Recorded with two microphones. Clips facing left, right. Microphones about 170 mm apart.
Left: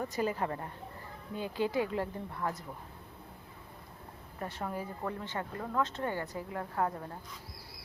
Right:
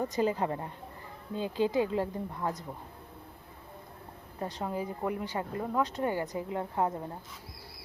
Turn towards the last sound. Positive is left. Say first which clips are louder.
# right 3 dB
turn(degrees=-20)  # may be behind; listen again after turning